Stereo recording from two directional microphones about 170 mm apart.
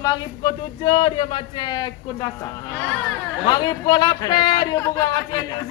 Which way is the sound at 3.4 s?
25° left (ahead or behind).